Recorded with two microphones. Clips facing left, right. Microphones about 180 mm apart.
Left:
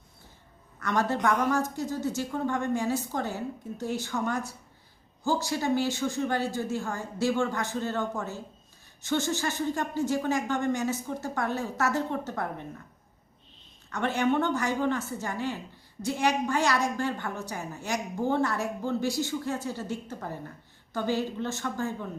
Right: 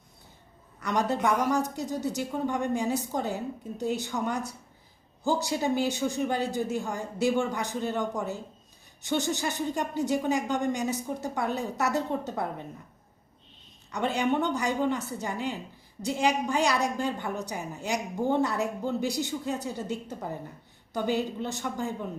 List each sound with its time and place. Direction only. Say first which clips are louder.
0.8 s a woman's voice: even; 15° right (ahead or behind)
13.9 s a woman's voice: left 1 dB; 15° right (ahead or behind)